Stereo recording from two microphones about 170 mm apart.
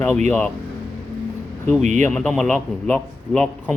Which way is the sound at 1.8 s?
45° right (ahead or behind).